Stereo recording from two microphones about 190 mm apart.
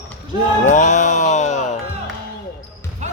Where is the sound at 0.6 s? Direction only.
40° left (ahead or behind).